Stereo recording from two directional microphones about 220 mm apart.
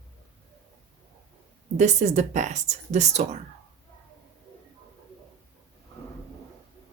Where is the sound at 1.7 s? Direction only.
35° right (ahead or behind).